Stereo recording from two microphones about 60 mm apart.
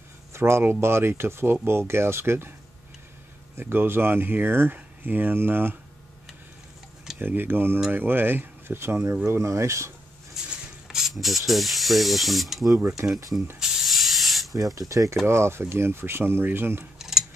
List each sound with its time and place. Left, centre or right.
0.3 s speech: right
3.5 s speech: right
7.2 s speech: right
10.9 s speech: centre
12.8 s speech: right
13.6 s a sound: centre
14.8 s speech: right
15.2 s speech: right
17.0 s a sound: centre